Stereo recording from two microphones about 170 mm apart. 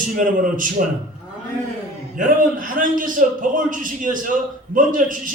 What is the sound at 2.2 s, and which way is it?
A man's voice, 55° right (ahead or behind).